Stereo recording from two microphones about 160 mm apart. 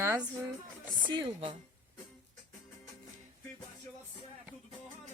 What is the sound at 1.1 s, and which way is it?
Speech, 30° right (ahead or behind).